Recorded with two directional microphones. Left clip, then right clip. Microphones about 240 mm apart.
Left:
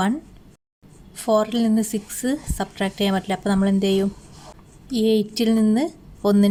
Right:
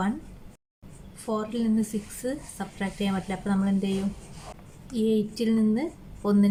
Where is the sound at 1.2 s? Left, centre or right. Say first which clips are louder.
Left 10 dB; left.